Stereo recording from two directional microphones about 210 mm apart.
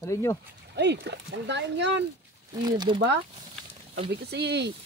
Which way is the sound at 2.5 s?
20° right (ahead or behind).